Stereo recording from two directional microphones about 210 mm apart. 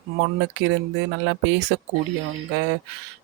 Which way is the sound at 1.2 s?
65° right (ahead or behind).